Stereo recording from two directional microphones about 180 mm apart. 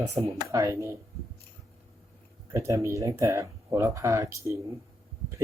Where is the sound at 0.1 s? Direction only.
15° right (ahead or behind).